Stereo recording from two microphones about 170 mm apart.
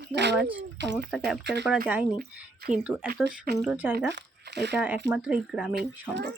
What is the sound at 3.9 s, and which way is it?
Speech, 90° right.